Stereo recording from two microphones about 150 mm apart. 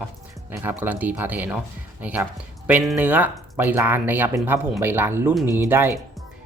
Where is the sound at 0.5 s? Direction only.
15° right (ahead or behind).